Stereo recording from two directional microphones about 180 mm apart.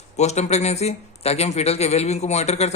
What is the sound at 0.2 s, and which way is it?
A man's voice, 40° left (ahead or behind).